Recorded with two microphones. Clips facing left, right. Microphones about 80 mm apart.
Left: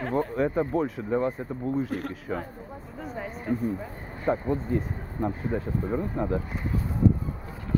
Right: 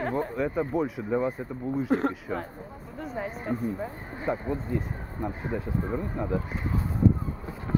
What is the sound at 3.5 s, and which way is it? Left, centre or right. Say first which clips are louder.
Speech: left 3 dB; centre.